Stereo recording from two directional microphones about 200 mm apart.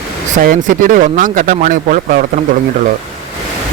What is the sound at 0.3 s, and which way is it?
Speech, 40° right (ahead or behind).